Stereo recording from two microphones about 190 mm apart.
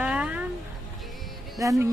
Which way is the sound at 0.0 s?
5° right (ahead or behind).